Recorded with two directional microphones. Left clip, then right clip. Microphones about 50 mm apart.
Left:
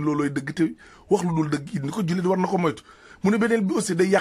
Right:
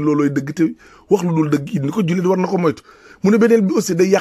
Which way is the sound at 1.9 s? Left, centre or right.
Right.